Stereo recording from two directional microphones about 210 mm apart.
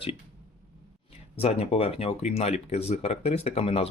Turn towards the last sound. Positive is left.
turn(degrees=30)  # may be behind; listen again after turning